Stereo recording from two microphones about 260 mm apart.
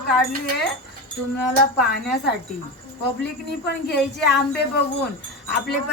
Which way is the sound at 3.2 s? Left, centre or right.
Left.